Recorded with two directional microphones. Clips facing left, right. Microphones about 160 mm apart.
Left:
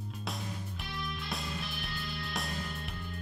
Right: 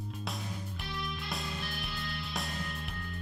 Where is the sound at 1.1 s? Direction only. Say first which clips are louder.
Even; centre (ahead or behind).